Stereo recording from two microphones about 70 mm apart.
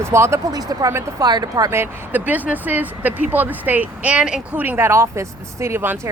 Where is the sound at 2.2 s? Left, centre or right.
Right.